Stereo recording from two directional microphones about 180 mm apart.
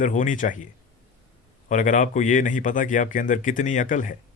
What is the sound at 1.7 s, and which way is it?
Speech, 45° left (ahead or behind).